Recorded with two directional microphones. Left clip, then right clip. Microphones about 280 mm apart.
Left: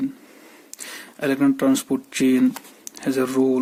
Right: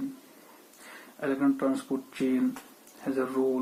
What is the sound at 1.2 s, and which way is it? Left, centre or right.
Speech, left.